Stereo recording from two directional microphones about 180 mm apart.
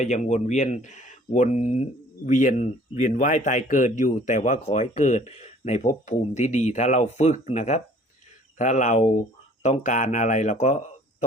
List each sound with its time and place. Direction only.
0.0 s speech: 40° left (ahead or behind)